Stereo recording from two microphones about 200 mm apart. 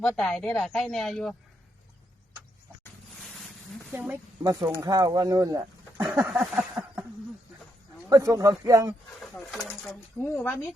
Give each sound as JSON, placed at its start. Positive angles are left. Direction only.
{"t": 0.0, "sound": "speech", "side_deg": 0}
{"t": 3.9, "sound": "speech", "side_deg": -10}
{"t": 6.1, "sound": "a sound", "side_deg": -5}
{"t": 8.1, "sound": "speech", "side_deg": -15}
{"t": 9.3, "sound": "speech", "side_deg": 0}
{"t": 10.3, "sound": "speech", "side_deg": 10}